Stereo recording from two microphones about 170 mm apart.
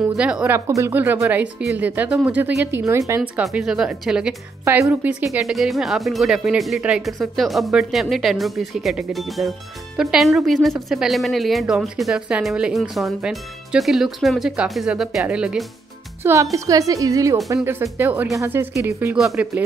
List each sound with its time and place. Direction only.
0.0 s speech: 5° right (ahead or behind)
3.2 s speech: 5° right (ahead or behind)
4.6 s speech: 15° right (ahead or behind)
19.1 s speech: centre (ahead or behind)